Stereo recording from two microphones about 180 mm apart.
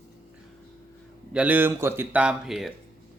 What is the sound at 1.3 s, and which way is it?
Speech, 10° right (ahead or behind).